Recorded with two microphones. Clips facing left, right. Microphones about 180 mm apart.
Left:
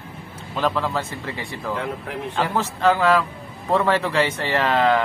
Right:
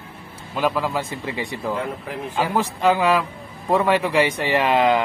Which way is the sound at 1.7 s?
Centre (ahead or behind).